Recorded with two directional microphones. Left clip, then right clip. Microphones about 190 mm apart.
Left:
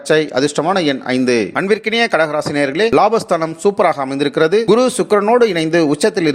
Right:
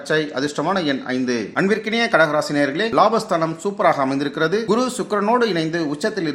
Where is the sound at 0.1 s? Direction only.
35° left (ahead or behind).